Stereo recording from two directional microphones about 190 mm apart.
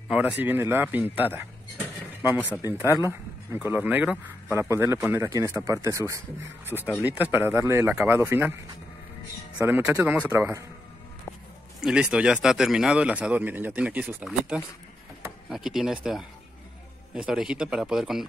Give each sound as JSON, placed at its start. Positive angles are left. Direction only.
{"t": 0.1, "sound": "speech", "side_deg": -10}
{"t": 2.3, "sound": "speech", "side_deg": 10}
{"t": 3.1, "sound": "speech", "side_deg": -10}
{"t": 9.6, "sound": "speech", "side_deg": -10}
{"t": 11.8, "sound": "speech", "side_deg": -5}